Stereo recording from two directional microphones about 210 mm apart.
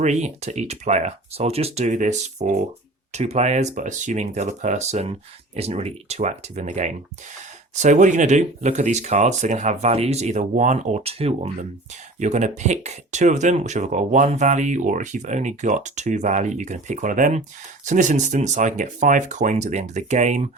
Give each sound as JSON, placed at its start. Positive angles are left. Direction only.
{"t": 0.0, "sound": "speech", "side_deg": -30}